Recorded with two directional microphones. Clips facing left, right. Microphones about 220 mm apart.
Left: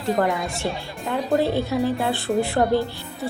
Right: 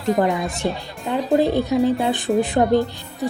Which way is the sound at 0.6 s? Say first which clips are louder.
Right 3 dB; 20° right (ahead or behind).